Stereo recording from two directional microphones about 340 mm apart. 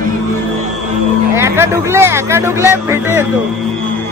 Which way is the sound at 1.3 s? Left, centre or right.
Centre.